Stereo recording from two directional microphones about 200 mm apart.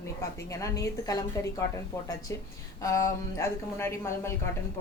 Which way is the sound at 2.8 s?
15° left (ahead or behind).